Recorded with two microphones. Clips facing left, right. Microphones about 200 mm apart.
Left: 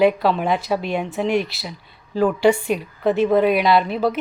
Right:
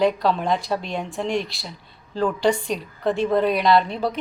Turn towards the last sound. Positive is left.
turn(degrees=5)  # may be behind; listen again after turning